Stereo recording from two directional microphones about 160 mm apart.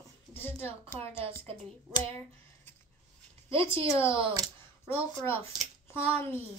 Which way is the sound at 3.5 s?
35° right (ahead or behind).